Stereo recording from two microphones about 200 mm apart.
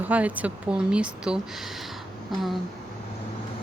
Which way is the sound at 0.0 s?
5° right (ahead or behind).